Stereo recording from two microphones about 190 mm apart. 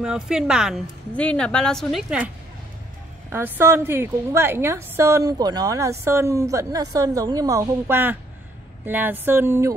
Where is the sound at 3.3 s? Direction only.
10° right (ahead or behind).